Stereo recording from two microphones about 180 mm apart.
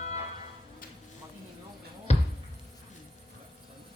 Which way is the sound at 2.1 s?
35° left (ahead or behind).